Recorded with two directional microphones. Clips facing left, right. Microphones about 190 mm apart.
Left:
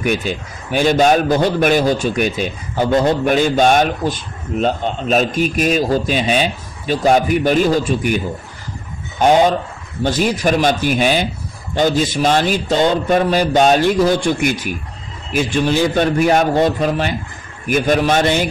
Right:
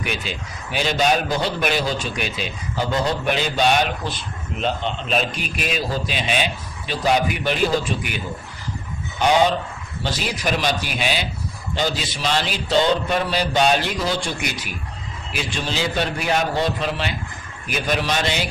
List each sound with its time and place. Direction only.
0.0 s a man's voice: 45° left (ahead or behind)
10.0 s a man's voice: 50° left (ahead or behind)